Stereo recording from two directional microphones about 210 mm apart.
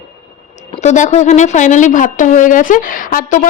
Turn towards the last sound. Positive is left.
turn(degrees=40)  # may be behind; listen again after turning